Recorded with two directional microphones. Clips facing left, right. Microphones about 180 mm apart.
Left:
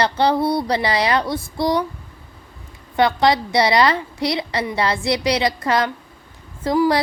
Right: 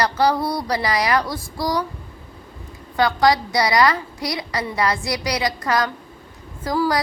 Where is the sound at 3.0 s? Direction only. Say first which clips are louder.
Left 1 dB; 25° left (ahead or behind).